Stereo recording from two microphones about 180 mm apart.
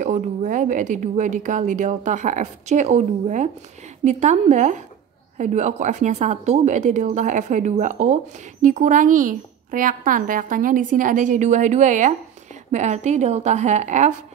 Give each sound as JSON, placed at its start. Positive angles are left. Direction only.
{"t": 0.0, "sound": "a woman's voice", "side_deg": -45}